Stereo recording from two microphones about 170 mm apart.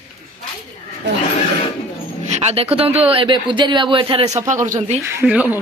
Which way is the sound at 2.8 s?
35° right (ahead or behind).